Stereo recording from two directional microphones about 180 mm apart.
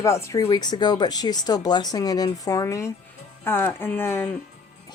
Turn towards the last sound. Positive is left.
turn(degrees=10)  # may be behind; listen again after turning